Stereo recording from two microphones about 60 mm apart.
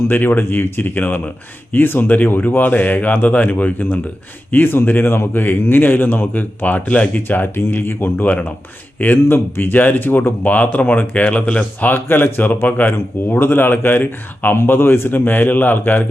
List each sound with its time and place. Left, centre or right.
0.1 s speech: left
9.2 s speech: left
11.9 s speech: left